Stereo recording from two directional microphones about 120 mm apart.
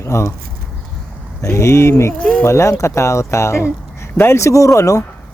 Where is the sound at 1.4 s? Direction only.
25° left (ahead or behind).